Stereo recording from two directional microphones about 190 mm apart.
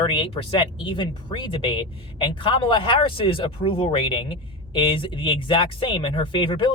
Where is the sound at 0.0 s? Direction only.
25° left (ahead or behind).